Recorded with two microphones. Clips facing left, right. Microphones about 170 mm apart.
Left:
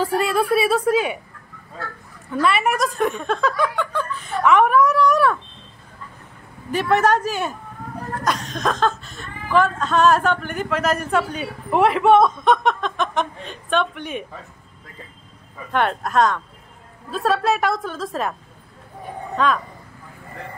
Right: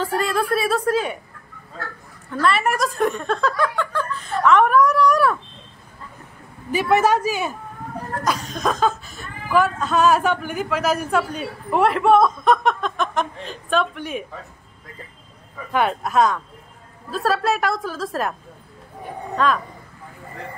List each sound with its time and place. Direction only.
0.0 s a sound: 10° left (ahead or behind)
2.4 s speech: 5° left (ahead or behind)
4.3 s a sound: 5° left (ahead or behind)
6.7 s speech: 5° right (ahead or behind)
15.7 s speech: 5° right (ahead or behind)
19.3 s speech: centre (ahead or behind)